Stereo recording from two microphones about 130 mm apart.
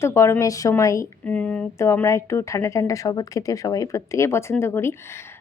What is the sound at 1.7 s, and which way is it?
A woman's voice, 20° left (ahead or behind).